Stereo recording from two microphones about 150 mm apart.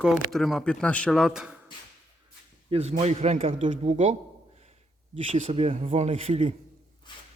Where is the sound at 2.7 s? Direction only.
45° right (ahead or behind).